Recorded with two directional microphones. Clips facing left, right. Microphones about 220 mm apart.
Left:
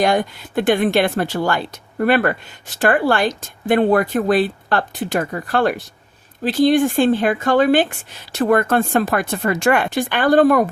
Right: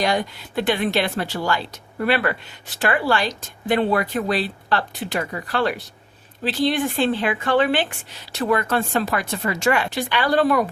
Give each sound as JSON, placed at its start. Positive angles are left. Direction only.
{"t": 0.0, "sound": "a woman's voice", "side_deg": 50}